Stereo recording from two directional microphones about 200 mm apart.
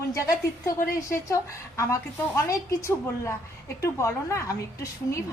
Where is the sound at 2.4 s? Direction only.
15° left (ahead or behind).